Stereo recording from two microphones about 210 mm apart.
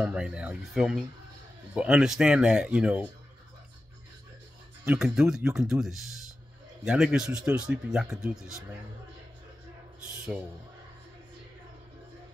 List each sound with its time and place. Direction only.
0.0 s speech: 5° right (ahead or behind)
4.8 s speech: 5° right (ahead or behind)